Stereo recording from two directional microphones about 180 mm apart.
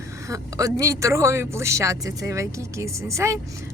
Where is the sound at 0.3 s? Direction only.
20° right (ahead or behind).